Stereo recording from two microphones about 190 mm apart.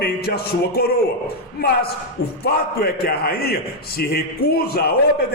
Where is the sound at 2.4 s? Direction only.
55° left (ahead or behind).